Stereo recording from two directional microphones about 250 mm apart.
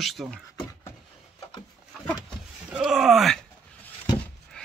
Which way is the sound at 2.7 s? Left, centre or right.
Centre.